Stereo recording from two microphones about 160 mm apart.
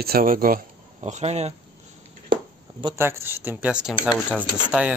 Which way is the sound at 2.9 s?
15° right (ahead or behind).